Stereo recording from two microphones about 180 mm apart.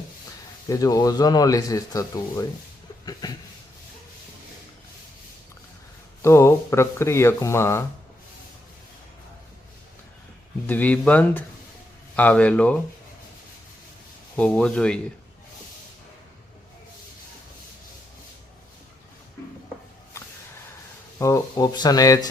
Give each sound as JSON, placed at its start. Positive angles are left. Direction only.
{"t": 0.7, "sound": "speech", "side_deg": 20}
{"t": 6.2, "sound": "speech", "side_deg": 15}
{"t": 10.7, "sound": "speech", "side_deg": 10}
{"t": 14.3, "sound": "speech", "side_deg": 5}
{"t": 21.2, "sound": "speech", "side_deg": 15}